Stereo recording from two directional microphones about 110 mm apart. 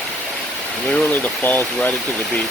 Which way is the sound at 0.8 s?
10° left (ahead or behind).